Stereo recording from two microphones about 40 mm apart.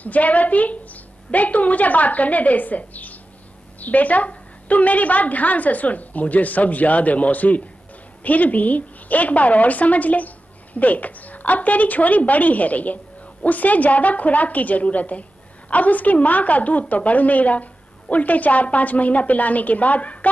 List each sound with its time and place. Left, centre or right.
0.0 s a woman's voice: left